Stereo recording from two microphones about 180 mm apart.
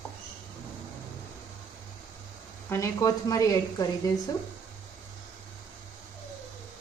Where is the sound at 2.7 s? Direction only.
15° left (ahead or behind).